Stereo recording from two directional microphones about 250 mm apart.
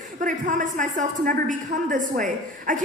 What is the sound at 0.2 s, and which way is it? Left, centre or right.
A woman's voice, right.